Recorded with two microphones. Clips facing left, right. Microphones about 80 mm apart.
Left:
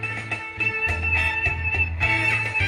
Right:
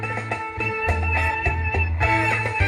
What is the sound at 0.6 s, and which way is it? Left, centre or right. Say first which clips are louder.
Music: right 1 dB; right.